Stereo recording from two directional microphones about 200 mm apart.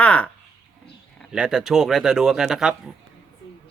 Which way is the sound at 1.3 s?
5° right (ahead or behind).